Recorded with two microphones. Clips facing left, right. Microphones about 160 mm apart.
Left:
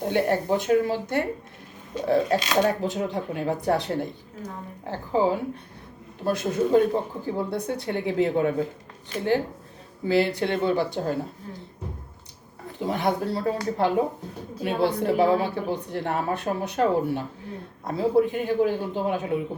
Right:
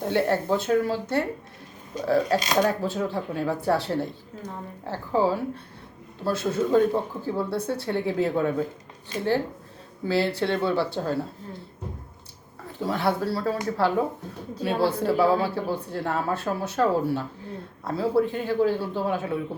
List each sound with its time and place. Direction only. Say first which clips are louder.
0.0 s a woman's voice: even; 15° left (ahead or behind)
12.8 s a woman's voice: even; 20° left (ahead or behind)